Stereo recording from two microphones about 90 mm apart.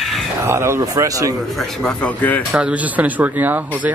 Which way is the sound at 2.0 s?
20° left (ahead or behind).